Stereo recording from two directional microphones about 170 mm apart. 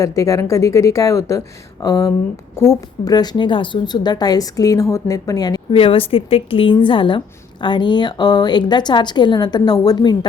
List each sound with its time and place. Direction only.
0.0 s a woman's voice: 20° left (ahead or behind)